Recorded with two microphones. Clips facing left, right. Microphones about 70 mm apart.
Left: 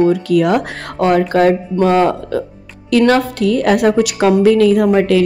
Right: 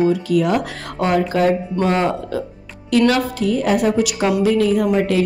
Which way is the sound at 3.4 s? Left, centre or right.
Left.